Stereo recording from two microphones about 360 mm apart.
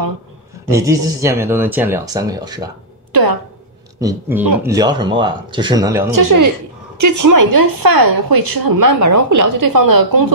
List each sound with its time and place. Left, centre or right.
0.7 s speech: centre
3.1 s a woman's voice: right
4.0 s speech: centre
6.1 s a woman's voice: right